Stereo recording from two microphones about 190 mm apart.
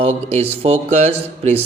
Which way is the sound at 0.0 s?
35° right (ahead or behind).